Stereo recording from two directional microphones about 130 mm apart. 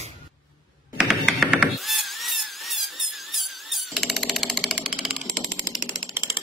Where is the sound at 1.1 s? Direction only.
5° right (ahead or behind).